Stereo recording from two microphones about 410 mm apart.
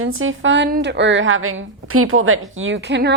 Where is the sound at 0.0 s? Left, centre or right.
Right.